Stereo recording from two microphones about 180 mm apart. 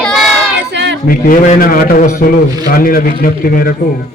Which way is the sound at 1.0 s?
50° left (ahead or behind).